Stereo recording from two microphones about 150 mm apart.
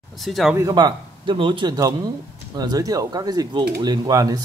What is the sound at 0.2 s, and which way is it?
Speech, centre (ahead or behind).